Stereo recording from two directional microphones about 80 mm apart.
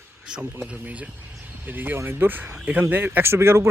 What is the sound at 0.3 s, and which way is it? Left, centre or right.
Speech, centre.